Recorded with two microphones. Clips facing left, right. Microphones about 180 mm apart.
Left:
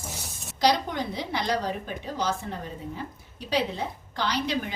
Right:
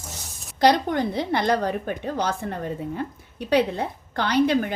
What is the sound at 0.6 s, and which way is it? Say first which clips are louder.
A woman's voice: right 5 dB; 55° right (ahead or behind).